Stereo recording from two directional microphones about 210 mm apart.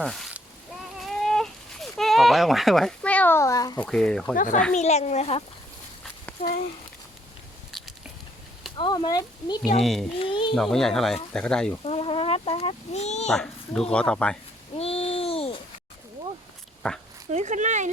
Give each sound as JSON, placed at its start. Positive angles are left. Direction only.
{"t": 0.0, "sound": "speech", "side_deg": 0}
{"t": 1.0, "sound": "baby cry", "side_deg": 0}
{"t": 3.8, "sound": "speech", "side_deg": 5}
{"t": 4.4, "sound": "speech", "side_deg": 40}
{"t": 7.7, "sound": "biting", "side_deg": 0}
{"t": 8.8, "sound": "fowl", "side_deg": 20}
{"t": 9.8, "sound": "speech", "side_deg": 0}
{"t": 10.2, "sound": "fowl", "side_deg": 25}
{"t": 10.5, "sound": "speech", "side_deg": 0}
{"t": 11.9, "sound": "fowl", "side_deg": 25}
{"t": 13.2, "sound": "a child's voice", "side_deg": 5}
{"t": 14.8, "sound": "babbling", "side_deg": 30}
{"t": 16.8, "sound": "speech", "side_deg": 5}
{"t": 17.3, "sound": "speech", "side_deg": -35}